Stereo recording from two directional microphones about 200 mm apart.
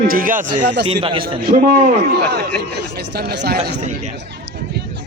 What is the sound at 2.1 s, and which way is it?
Speech, 55° right (ahead or behind).